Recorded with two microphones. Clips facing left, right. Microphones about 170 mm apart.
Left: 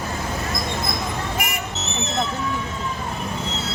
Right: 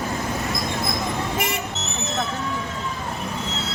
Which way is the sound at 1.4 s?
25° right (ahead or behind).